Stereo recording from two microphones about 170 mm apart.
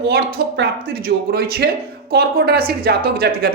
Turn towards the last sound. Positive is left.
turn(degrees=-60)  # may be behind; listen again after turning